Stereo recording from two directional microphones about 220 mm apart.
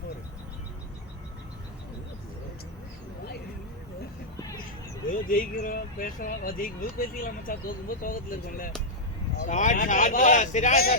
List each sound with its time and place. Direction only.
5.3 s speech: 40° left (ahead or behind)